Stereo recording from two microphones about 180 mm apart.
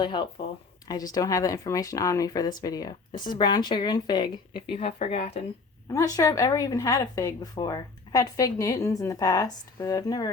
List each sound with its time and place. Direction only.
0.0 s speech: 25° left (ahead or behind)
4.8 s speech: 35° left (ahead or behind)
5.9 s speech: 20° left (ahead or behind)